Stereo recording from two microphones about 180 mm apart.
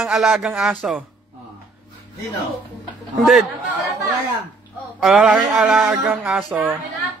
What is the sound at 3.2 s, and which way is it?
Speech, centre (ahead or behind).